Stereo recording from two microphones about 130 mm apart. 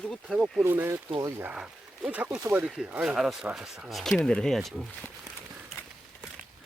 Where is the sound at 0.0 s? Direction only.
5° left (ahead or behind).